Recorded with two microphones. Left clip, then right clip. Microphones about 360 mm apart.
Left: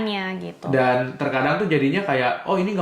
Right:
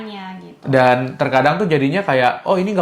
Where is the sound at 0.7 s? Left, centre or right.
Right.